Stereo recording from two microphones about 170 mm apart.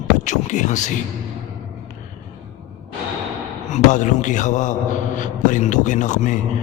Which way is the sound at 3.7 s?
45° left (ahead or behind).